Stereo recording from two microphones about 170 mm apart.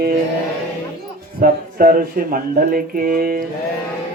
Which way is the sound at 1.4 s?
55° right (ahead or behind).